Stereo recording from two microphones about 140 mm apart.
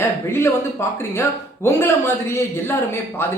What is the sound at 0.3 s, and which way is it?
A man's voice, 15° left (ahead or behind).